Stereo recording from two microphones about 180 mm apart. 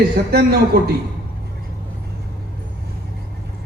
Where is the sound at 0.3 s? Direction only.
60° right (ahead or behind).